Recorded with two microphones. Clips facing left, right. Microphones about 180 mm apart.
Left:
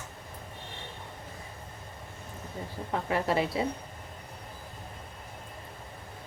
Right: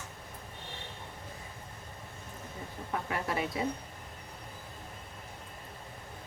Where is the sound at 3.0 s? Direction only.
30° left (ahead or behind).